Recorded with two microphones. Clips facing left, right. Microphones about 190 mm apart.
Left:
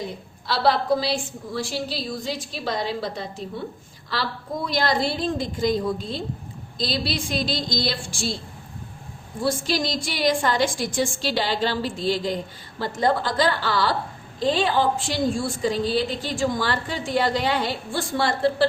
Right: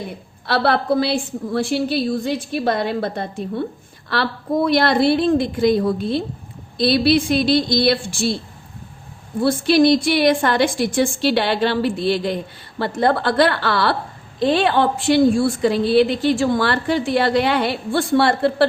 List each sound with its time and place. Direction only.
0.4 s a woman's voice: 60° right (ahead or behind)
9.4 s a woman's voice: 65° right (ahead or behind)